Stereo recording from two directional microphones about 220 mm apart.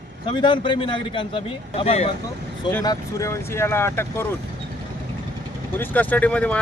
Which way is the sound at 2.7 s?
15° left (ahead or behind).